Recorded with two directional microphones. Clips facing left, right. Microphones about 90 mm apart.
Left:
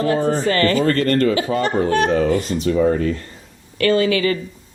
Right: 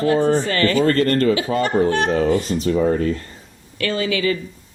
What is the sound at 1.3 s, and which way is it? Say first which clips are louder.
Speech: even; 35° left (ahead or behind).